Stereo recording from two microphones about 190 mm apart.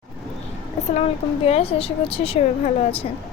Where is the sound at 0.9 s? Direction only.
35° left (ahead or behind).